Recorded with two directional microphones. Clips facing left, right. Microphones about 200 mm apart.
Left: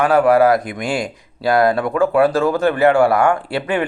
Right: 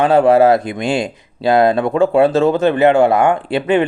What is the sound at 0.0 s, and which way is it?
Speech, 25° right (ahead or behind).